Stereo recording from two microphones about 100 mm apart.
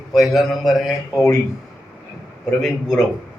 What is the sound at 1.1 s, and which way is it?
Speech, 30° left (ahead or behind).